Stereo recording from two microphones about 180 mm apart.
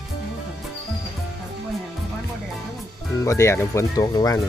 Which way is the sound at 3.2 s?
15° left (ahead or behind).